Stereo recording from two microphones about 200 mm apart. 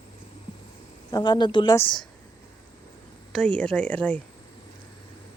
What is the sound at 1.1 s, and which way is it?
Speech, 20° left (ahead or behind).